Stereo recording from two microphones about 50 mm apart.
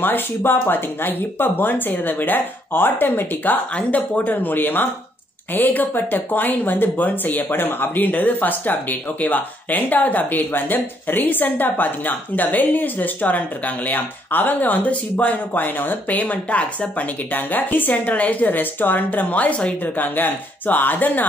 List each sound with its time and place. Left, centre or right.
0.0 s speech: left
3.7 s speech: left